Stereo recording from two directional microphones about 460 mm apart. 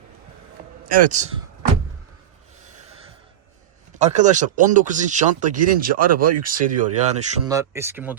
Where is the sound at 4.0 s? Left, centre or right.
Centre.